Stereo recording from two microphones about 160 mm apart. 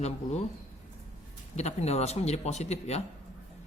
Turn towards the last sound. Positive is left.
turn(degrees=40)  # may be behind; listen again after turning